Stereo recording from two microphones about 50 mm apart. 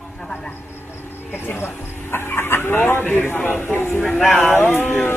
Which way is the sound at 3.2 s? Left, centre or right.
Left.